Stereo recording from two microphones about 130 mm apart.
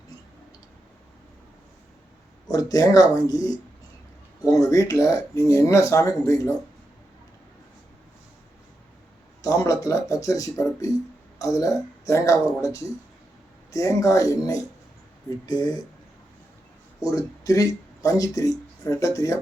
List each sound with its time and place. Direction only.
2.5 s speech: 25° left (ahead or behind)
4.6 s speech: 25° left (ahead or behind)
9.4 s speech: 25° left (ahead or behind)
17.4 s speech: 25° left (ahead or behind)